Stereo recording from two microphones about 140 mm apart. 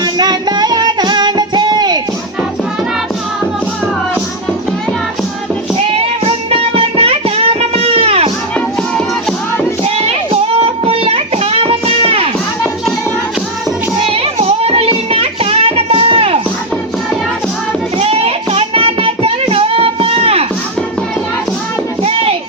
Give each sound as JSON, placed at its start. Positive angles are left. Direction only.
{"t": 0.0, "sound": "music", "side_deg": -30}
{"t": 5.9, "sound": "music", "side_deg": -45}
{"t": 10.6, "sound": "music", "side_deg": -45}
{"t": 14.1, "sound": "music", "side_deg": -45}
{"t": 18.0, "sound": "child singing", "side_deg": -45}
{"t": 22.0, "sound": "music", "side_deg": -45}